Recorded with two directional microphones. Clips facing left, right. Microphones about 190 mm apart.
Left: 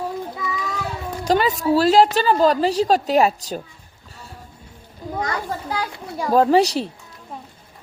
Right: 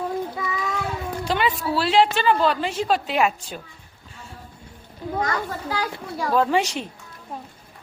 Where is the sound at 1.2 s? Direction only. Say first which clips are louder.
Left 6 dB; 40° left (ahead or behind).